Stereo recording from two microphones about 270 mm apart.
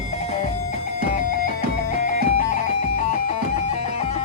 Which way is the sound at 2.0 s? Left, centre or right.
Left.